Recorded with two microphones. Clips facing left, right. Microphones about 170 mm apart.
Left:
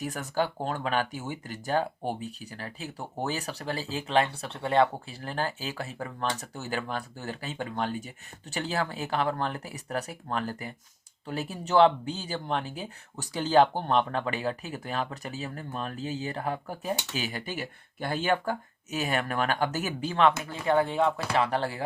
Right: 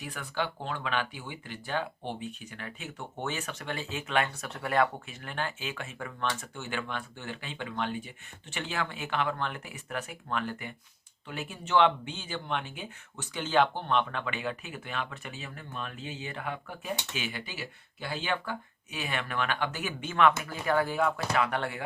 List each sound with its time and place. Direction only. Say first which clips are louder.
0.0 s speech: left 5 dB; 40° left (ahead or behind)